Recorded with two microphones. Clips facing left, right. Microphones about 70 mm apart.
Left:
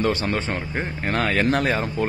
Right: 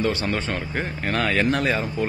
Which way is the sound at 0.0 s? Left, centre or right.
Left.